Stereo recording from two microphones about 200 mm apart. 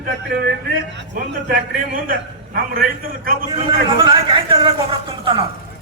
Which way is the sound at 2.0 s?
45° right (ahead or behind).